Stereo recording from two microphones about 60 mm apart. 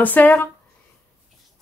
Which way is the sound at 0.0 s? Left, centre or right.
Left.